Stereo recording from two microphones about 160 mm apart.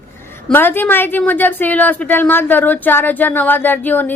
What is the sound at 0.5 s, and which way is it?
A woman's voice, 15° left (ahead or behind).